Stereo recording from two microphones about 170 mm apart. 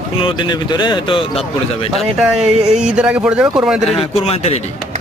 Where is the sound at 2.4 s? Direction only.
40° right (ahead or behind).